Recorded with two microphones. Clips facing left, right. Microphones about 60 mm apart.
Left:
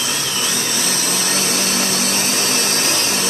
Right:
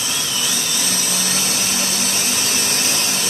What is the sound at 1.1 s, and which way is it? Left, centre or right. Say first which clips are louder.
Vacuum cleaner: left 3 dB; left.